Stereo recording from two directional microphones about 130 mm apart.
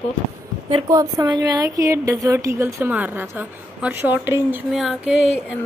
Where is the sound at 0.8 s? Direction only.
25° right (ahead or behind).